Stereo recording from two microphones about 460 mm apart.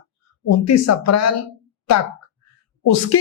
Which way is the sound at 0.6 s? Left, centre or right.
Left.